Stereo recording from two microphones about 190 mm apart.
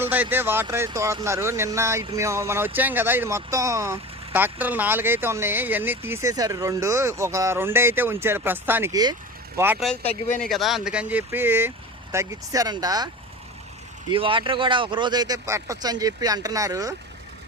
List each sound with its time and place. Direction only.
0.0 s speech: 10° right (ahead or behind)
9.8 s speech: 5° left (ahead or behind); by 13.1 s 20° right (ahead or behind)
14.1 s speech: 25° right (ahead or behind)